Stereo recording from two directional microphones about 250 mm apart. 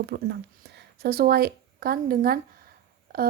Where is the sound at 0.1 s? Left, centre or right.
Right.